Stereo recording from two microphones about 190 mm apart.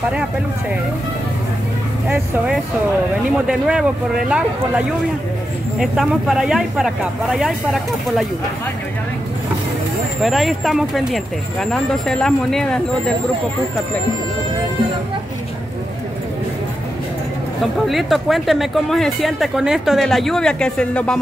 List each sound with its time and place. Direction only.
2.0 s speech: 5° right (ahead or behind)
10.2 s speech: centre (ahead or behind)
17.8 s speech: centre (ahead or behind)